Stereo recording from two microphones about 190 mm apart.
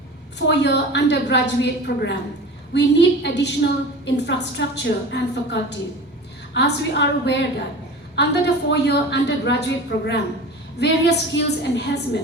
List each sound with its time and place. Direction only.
0.3 s a woman's voice: 65° left (ahead or behind)
10.8 s a woman's voice: 65° left (ahead or behind)